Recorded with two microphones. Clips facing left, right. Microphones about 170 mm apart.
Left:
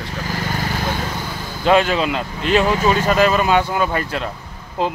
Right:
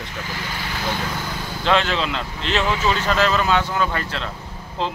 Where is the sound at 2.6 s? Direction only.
45° left (ahead or behind).